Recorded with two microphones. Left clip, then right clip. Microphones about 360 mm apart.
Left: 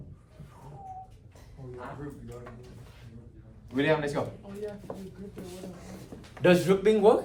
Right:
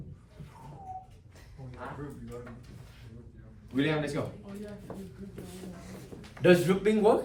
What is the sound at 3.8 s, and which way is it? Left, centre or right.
Speech, centre.